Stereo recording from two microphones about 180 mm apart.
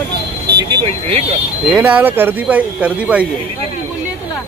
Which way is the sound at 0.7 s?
30° right (ahead or behind).